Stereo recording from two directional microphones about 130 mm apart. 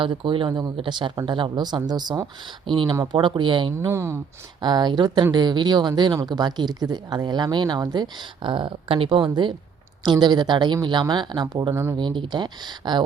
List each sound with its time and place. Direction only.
0.0 s speech: 40° right (ahead or behind)
2.9 s speech: 25° right (ahead or behind)
3.2 s speech: 40° right (ahead or behind)
3.8 s speech: 20° right (ahead or behind)
4.6 s speech: 35° right (ahead or behind)
11.7 s speech: 20° right (ahead or behind)
11.9 s speech: 40° right (ahead or behind)